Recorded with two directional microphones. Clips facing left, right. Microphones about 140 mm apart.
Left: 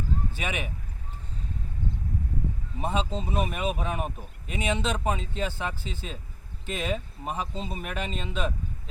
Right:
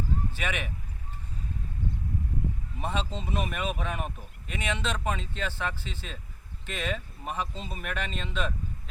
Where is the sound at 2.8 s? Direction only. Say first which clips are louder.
Left 4 dB; 40° left (ahead or behind).